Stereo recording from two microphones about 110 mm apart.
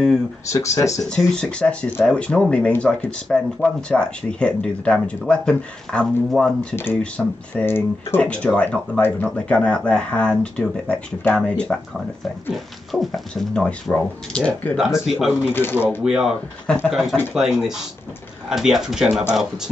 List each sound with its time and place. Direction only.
0.5 s speech: 30° left (ahead or behind)
1.0 s speech: 5° left (ahead or behind)
6.7 s speech: 20° left (ahead or behind)
7.0 s speech: 10° left (ahead or behind)
7.6 s speech: 20° left (ahead or behind)
12.9 s speech: centre (ahead or behind)
14.8 s speech: 5° right (ahead or behind)
16.6 s speech: 15° left (ahead or behind)
16.9 s speech: centre (ahead or behind)